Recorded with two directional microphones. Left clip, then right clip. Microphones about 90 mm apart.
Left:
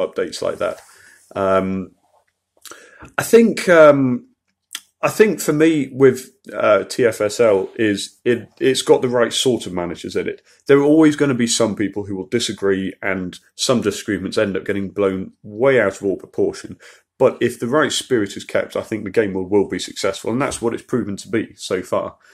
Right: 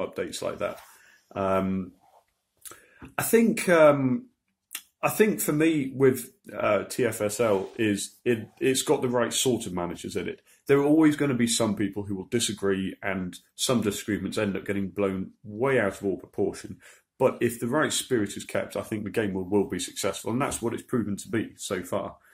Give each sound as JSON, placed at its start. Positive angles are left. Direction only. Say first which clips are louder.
{"t": 0.0, "sound": "speech", "louder": "left 10 dB", "side_deg": 15}
{"t": 11.9, "sound": "speech", "louder": "left 8 dB", "side_deg": 5}